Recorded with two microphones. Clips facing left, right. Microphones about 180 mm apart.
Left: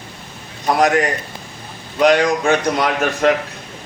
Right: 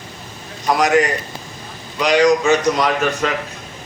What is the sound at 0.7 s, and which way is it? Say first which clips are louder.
Speech: left 1 dB; 55° left (ahead or behind).